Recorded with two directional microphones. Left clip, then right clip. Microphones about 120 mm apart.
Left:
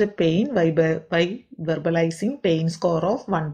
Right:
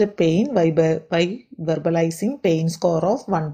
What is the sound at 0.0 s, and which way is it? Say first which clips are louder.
Speech: right 2 dB; 25° right (ahead or behind).